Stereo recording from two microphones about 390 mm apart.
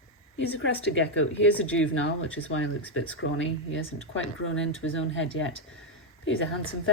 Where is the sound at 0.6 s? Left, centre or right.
Left.